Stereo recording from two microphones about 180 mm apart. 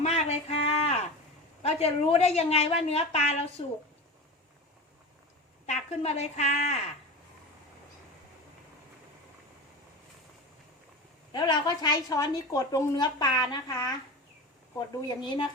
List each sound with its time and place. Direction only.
0.0 s a sound: 35° left (ahead or behind)
1.6 s a woman's voice: 35° left (ahead or behind)
5.6 s a woman's voice: 35° left (ahead or behind)
11.3 s a woman's voice: 25° left (ahead or behind)